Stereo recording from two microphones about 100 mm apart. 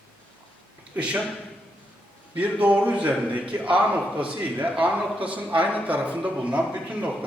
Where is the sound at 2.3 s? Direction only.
15° right (ahead or behind).